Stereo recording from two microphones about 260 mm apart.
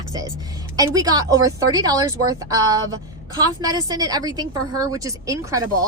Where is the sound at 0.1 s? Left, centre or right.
Centre.